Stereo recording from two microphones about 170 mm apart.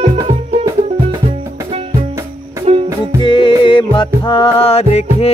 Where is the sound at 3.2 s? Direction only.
30° left (ahead or behind).